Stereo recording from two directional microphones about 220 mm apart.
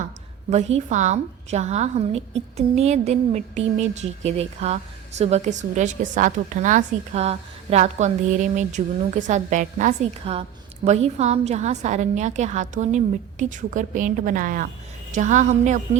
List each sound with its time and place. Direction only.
0.5 s a woman's voice: 30° right (ahead or behind)